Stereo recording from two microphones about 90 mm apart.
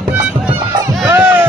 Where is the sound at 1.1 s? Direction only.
20° right (ahead or behind).